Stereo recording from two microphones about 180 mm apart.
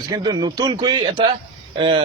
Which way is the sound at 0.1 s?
20° right (ahead or behind).